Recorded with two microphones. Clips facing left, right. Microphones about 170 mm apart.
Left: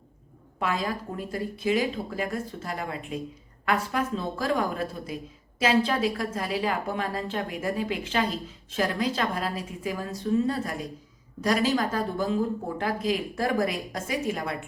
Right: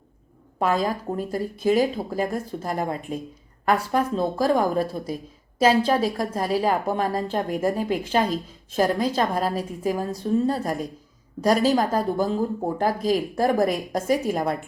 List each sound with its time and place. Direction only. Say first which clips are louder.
0.6 s a woman's voice: right 6 dB; 40° right (ahead or behind)